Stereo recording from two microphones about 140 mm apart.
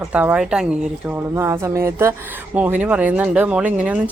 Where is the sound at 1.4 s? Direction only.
20° right (ahead or behind).